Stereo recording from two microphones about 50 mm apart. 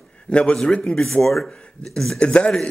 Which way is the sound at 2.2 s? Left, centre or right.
Centre.